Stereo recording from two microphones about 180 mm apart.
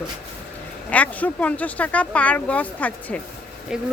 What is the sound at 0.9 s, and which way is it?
Speech, 10° left (ahead or behind).